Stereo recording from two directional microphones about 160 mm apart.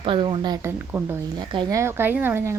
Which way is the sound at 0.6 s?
15° right (ahead or behind).